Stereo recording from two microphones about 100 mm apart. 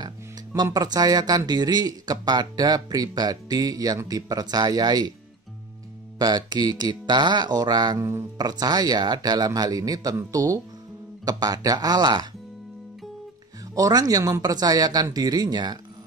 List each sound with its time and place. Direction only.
0.7 s speech: 40° right (ahead or behind)
6.1 s speech: 45° right (ahead or behind)
8.0 s speech: 25° right (ahead or behind)
8.4 s speech: 40° right (ahead or behind)
13.7 s speech: 40° right (ahead or behind)